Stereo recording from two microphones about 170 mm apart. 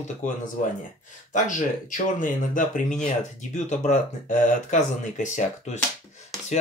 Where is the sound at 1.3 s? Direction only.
50° left (ahead or behind).